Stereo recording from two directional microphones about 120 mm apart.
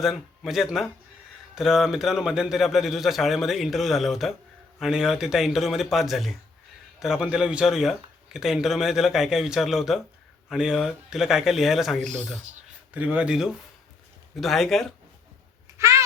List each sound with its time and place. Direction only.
0.0 s speech: centre (ahead or behind)
12.9 s speech: 10° right (ahead or behind)
15.8 s a sound: 25° right (ahead or behind)